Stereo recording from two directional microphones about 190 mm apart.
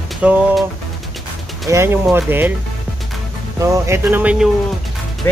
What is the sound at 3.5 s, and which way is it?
Speech, 15° right (ahead or behind).